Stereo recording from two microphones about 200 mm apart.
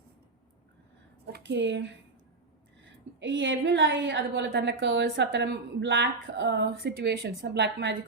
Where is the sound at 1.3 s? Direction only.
60° right (ahead or behind).